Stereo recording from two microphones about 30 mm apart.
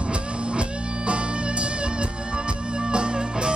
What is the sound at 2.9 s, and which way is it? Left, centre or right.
Music, right.